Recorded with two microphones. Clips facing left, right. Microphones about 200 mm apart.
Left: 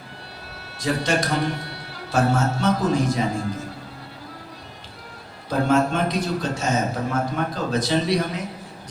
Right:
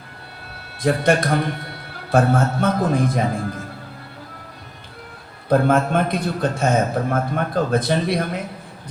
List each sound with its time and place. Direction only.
0.8 s a man's voice: 55° right (ahead or behind)
5.5 s a man's voice: 55° right (ahead or behind)